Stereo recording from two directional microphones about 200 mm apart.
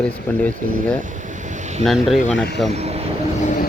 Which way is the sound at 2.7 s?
30° right (ahead or behind).